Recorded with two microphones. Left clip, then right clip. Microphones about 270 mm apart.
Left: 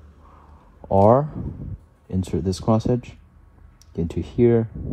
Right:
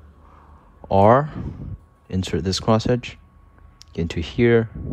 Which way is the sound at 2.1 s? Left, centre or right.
Left.